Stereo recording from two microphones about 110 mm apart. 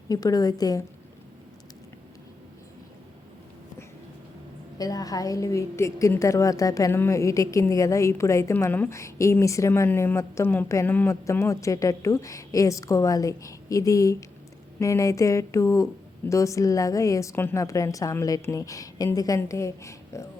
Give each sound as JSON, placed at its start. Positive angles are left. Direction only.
{"t": 0.1, "sound": "a woman's voice", "side_deg": 35}
{"t": 4.8, "sound": "a woman's voice", "side_deg": 35}